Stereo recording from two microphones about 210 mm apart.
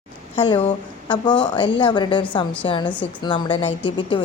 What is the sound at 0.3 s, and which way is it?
A woman's voice, 25° left (ahead or behind).